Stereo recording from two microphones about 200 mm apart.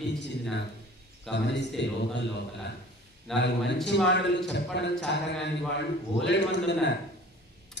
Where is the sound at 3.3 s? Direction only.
Centre (ahead or behind).